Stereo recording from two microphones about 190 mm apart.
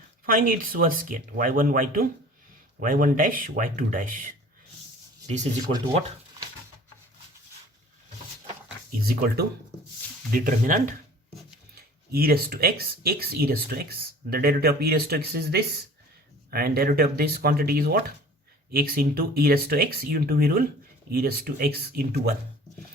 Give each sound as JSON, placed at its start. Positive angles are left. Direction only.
{"t": 0.3, "sound": "speech", "side_deg": -45}
{"t": 9.0, "sound": "speech", "side_deg": -50}